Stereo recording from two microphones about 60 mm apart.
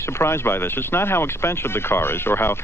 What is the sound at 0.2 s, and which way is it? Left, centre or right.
Speech, left.